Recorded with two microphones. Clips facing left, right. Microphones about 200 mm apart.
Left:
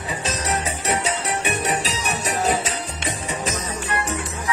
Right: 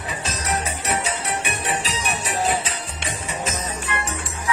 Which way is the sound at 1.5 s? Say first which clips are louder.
Left 3 dB; 40° left (ahead or behind).